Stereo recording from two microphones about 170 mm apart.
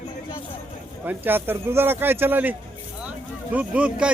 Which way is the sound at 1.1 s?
10° right (ahead or behind).